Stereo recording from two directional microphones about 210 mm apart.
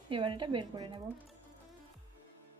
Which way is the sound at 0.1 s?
25° right (ahead or behind).